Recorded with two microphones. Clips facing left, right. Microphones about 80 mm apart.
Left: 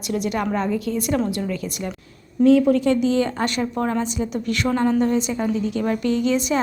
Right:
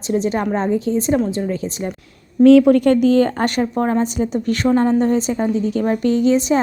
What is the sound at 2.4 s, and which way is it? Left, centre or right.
Speech, right.